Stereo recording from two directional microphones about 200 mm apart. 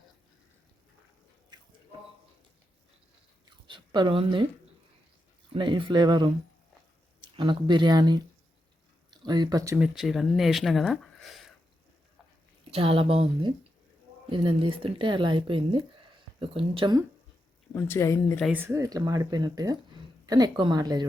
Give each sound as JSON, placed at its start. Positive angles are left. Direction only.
{"t": 3.7, "sound": "speech", "side_deg": -25}
{"t": 5.5, "sound": "speech", "side_deg": -25}
{"t": 9.7, "sound": "speech", "side_deg": -5}
{"t": 12.7, "sound": "speech", "side_deg": -25}
{"t": 17.7, "sound": "speech", "side_deg": 10}
{"t": 18.4, "sound": "speech", "side_deg": -10}